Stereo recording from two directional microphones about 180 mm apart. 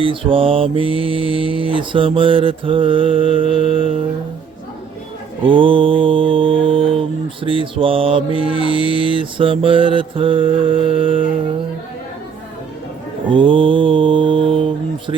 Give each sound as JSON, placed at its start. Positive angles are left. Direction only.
{"t": 0.0, "sound": "mantra", "side_deg": -30}
{"t": 5.4, "sound": "mantra", "side_deg": -30}
{"t": 13.2, "sound": "mantra", "side_deg": -30}